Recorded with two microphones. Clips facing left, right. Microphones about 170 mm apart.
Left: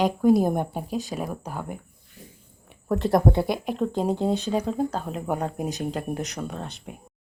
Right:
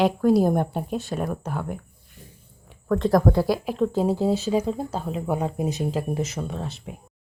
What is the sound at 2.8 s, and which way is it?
Speech, 5° left (ahead or behind).